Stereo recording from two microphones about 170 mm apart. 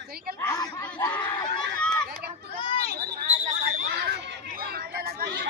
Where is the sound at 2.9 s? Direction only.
65° right (ahead or behind).